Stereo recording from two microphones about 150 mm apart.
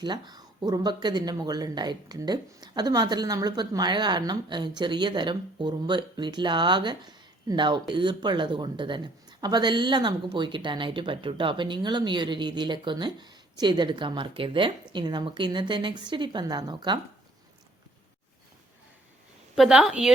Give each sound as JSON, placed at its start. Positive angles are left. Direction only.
{"t": 0.0, "sound": "speech", "side_deg": -30}
{"t": 19.5, "sound": "a woman's voice", "side_deg": -5}